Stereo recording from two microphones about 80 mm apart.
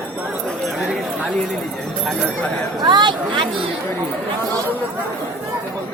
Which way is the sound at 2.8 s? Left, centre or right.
Right.